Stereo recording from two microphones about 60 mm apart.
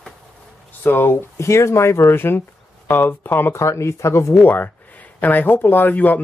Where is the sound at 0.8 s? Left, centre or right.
Left.